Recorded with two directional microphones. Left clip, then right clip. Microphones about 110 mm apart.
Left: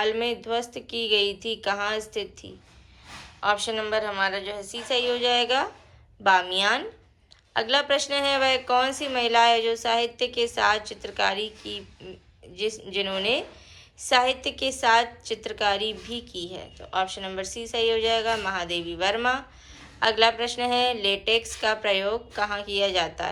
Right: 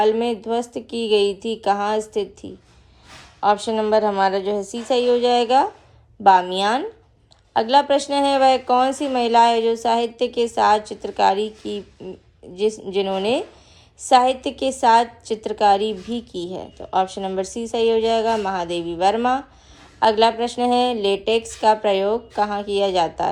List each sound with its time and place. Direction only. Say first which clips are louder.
0.0 s a woman's voice: right 7 dB; 35° right (ahead or behind)